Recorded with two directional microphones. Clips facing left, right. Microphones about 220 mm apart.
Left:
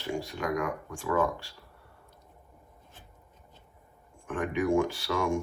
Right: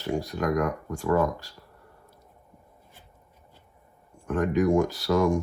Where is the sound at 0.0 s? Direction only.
40° right (ahead or behind).